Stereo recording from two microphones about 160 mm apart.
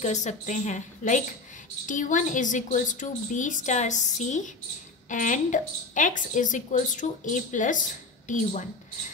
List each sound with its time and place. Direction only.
0.0 s a woman's voice: 50° left (ahead or behind)